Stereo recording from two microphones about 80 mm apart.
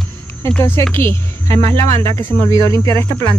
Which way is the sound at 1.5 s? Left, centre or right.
Left.